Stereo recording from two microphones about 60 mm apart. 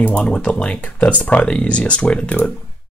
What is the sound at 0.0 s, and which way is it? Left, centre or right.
Speech, left.